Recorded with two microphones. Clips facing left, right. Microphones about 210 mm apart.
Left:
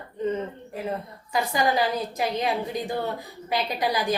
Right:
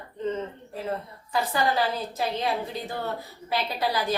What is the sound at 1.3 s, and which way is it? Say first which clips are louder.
A woman's voice: left 1 dB; 15° left (ahead or behind).